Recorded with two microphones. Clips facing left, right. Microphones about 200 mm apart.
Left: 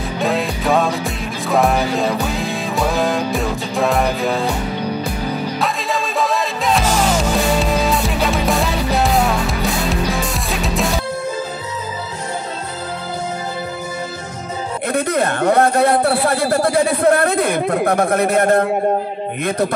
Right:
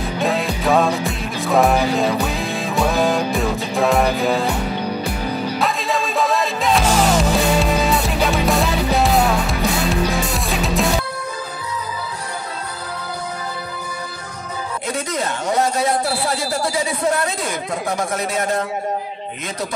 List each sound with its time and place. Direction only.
0.2 s music: centre (ahead or behind)
5.6 s music: centre (ahead or behind)
14.9 s a man's voice: 60° left (ahead or behind)